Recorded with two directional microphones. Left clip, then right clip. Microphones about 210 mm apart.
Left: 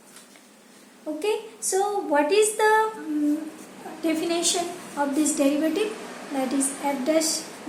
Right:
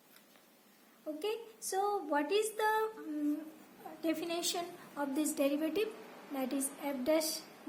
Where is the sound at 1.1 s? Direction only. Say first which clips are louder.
Left 13 dB; 50° right (ahead or behind).